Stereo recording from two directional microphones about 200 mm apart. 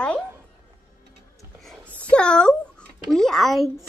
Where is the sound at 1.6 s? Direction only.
Centre (ahead or behind).